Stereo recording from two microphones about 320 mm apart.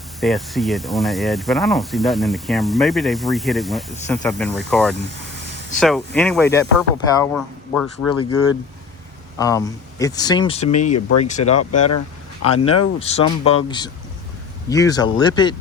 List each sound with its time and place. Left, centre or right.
0.2 s speech: centre
8.2 s speech: left
9.4 s speech: centre
10.9 s speech: left
11.3 s speech: left
11.5 s speech: left
12.5 s speech: centre